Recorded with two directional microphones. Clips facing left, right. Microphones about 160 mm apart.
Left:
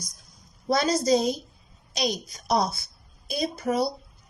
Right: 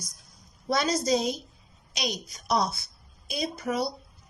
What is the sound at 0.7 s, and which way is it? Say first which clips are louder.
A woman's voice: left 3 dB; 35° left (ahead or behind).